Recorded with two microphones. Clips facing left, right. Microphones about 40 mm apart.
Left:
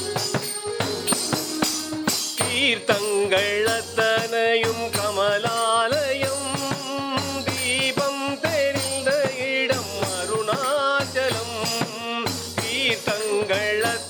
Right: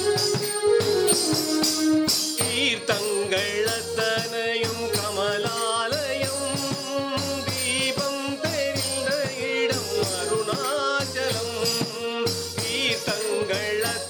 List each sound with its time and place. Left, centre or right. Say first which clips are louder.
1.1 s music: right 2 dB; left
2.6 s music: left 4 dB; centre
3.3 s jingle bell: left 4 dB; left
3.7 s music: left 4 dB; left
4.6 s music: left 3 dB; left
5.2 s music: left 5 dB; left
7.8 s music: left 2 dB; left
10.7 s music: left 3 dB; centre
11.3 s music: left 1 dB; left